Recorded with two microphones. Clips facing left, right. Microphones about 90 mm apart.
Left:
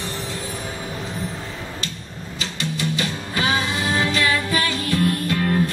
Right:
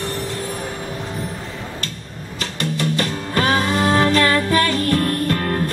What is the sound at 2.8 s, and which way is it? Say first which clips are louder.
Music: right 3 dB; 50° right (ahead or behind).